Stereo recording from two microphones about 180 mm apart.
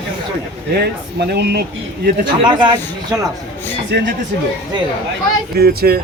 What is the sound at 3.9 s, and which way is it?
Speech, 70° right (ahead or behind).